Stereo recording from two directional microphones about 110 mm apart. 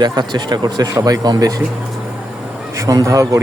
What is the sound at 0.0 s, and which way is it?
Speech, 40° right (ahead or behind).